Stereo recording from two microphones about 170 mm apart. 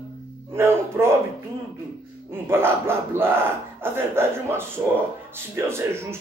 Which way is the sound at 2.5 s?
15° right (ahead or behind).